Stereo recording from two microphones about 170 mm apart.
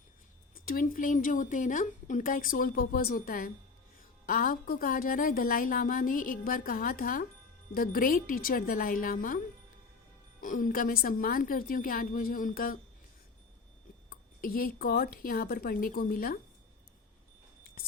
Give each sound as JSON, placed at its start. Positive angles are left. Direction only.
{"t": 0.5, "sound": "a woman's voice", "side_deg": 55}
{"t": 10.4, "sound": "a woman's voice", "side_deg": 50}
{"t": 14.1, "sound": "a woman's voice", "side_deg": 55}